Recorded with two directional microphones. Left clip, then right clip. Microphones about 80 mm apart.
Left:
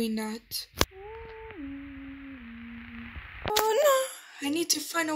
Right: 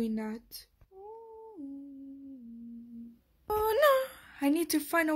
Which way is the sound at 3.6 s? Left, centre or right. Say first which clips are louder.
Left 1 dB; centre.